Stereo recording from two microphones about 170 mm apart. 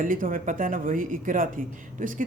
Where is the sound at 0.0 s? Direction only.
50° right (ahead or behind).